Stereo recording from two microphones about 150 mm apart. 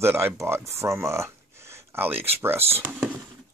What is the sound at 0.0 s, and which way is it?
Speech, 15° right (ahead or behind).